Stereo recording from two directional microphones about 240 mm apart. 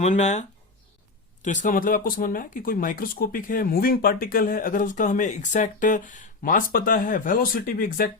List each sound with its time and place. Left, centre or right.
0.0 s speech: left